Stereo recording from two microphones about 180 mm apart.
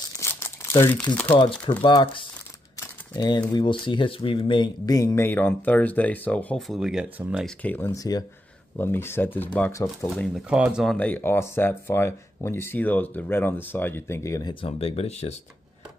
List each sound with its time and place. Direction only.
0.2 s crumpling: 15° left (ahead or behind)
1.8 s speech: 30° left (ahead or behind); by 7.4 s 5° right (ahead or behind)
7.4 s speech: 10° left (ahead or behind)
14.5 s speech: 30° left (ahead or behind)